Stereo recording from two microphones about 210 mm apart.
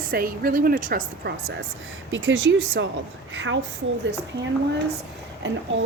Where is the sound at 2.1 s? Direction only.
65° right (ahead or behind).